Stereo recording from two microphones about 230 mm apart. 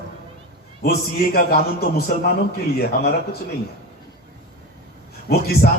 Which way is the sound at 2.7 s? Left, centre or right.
Left.